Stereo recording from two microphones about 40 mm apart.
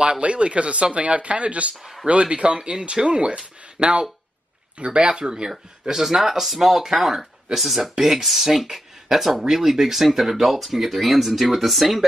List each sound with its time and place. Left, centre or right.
0.0 s speech: right
5.2 s speech: centre